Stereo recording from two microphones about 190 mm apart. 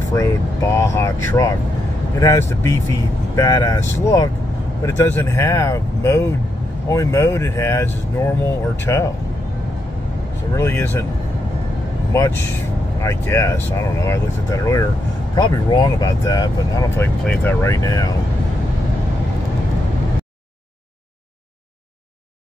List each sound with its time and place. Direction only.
0.1 s speech: 15° left (ahead or behind)
10.5 s speech: 15° left (ahead or behind)
12.1 s speech: 15° left (ahead or behind)